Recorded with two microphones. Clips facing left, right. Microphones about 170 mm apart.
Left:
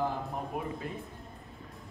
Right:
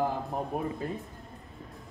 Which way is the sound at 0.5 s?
40° right (ahead or behind).